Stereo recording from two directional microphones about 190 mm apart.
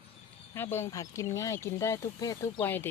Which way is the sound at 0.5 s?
10° left (ahead or behind).